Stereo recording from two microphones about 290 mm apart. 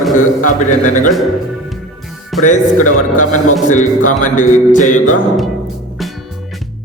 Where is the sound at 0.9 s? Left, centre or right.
Left.